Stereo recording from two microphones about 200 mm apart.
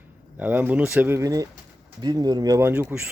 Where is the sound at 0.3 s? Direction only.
10° right (ahead or behind).